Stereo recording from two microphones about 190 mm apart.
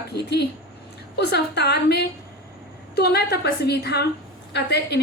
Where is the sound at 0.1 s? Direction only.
60° left (ahead or behind).